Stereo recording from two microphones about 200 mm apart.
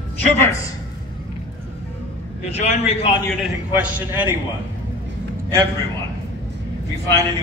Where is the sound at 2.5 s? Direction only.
35° left (ahead or behind).